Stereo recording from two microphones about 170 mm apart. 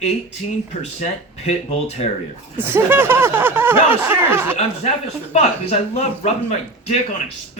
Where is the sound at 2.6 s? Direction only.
10° right (ahead or behind).